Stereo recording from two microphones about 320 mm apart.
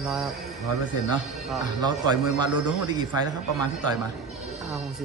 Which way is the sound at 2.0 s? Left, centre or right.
Left.